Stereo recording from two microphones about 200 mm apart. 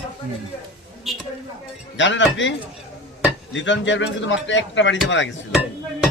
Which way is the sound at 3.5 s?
65° left (ahead or behind).